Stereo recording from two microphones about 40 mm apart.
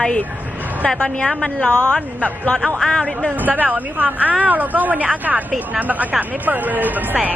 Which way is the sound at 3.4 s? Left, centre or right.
Right.